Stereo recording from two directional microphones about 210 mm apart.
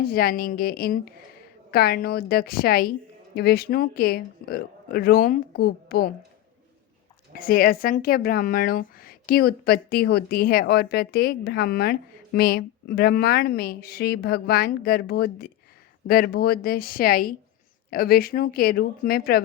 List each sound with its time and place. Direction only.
0.0 s speech: 45° left (ahead or behind)
7.3 s speech: 45° left (ahead or behind)